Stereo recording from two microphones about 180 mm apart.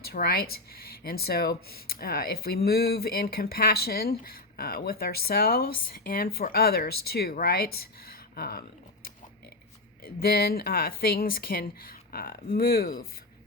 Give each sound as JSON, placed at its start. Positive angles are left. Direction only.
{"t": 0.0, "sound": "speech", "side_deg": 60}
{"t": 10.0, "sound": "speech", "side_deg": 55}